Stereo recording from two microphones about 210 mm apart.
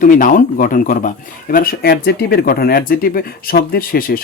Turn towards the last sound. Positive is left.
turn(degrees=45)  # may be behind; listen again after turning